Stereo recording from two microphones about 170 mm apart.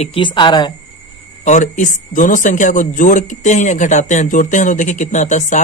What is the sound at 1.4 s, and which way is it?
Speech, 45° left (ahead or behind).